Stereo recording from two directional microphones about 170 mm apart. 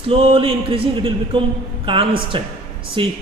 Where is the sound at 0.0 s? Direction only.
35° right (ahead or behind).